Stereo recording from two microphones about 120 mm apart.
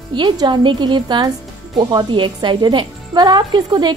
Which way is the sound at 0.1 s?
40° right (ahead or behind).